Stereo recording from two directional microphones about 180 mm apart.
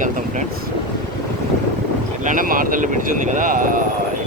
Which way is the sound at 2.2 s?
50° right (ahead or behind).